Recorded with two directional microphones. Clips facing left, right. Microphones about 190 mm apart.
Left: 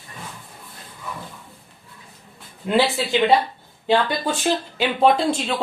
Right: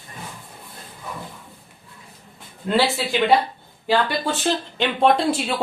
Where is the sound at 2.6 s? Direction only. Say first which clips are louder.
Left 1 dB; 20° left (ahead or behind).